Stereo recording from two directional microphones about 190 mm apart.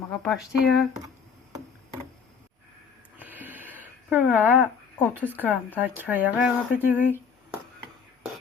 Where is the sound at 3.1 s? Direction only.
10° right (ahead or behind).